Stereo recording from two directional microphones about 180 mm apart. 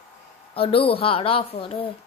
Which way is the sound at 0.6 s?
30° left (ahead or behind).